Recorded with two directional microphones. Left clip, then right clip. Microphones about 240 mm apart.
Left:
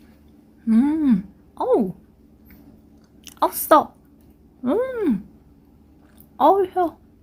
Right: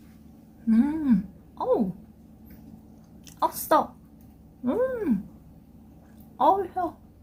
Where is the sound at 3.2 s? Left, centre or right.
Left.